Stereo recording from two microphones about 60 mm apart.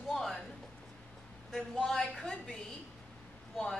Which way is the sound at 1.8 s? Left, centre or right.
Centre.